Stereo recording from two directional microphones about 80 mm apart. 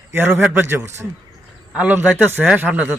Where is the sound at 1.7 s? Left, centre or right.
Centre.